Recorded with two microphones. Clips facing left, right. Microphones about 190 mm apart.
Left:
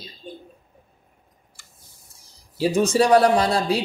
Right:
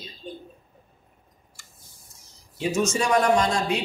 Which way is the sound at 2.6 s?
35° left (ahead or behind).